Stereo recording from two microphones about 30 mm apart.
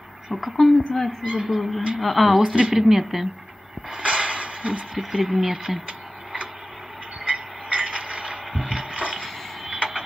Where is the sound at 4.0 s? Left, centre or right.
Right.